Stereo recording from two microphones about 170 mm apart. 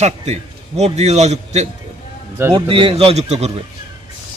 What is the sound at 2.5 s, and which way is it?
Speech, 30° right (ahead or behind).